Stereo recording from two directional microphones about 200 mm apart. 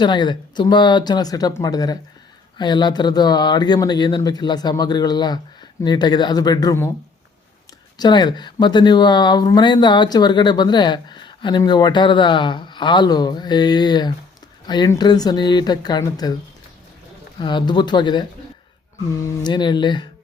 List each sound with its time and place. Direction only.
0.0 s speech: 20° left (ahead or behind)
7.9 s speech: 20° left (ahead or behind)
17.3 s speech: 25° left (ahead or behind)
19.4 s speech: 20° left (ahead or behind)